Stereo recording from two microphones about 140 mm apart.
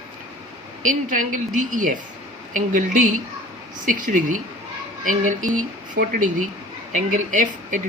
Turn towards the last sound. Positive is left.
turn(degrees=-65)  # may be behind; listen again after turning